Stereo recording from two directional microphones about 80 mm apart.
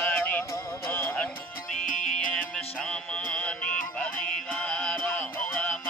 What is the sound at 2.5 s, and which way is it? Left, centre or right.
Music, centre.